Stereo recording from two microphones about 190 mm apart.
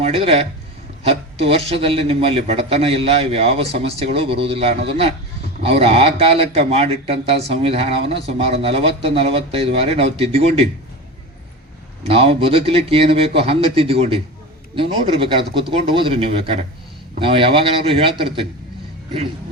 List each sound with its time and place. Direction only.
0.0 s a man's voice: 30° right (ahead or behind)
12.0 s a man's voice: 30° right (ahead or behind)